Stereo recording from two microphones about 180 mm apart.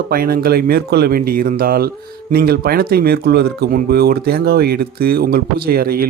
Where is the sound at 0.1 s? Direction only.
55° right (ahead or behind).